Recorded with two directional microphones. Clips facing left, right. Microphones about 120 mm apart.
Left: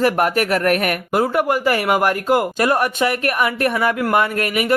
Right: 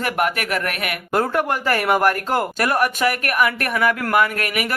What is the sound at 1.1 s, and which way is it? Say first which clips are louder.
Speech: left 2 dB; 10° left (ahead or behind).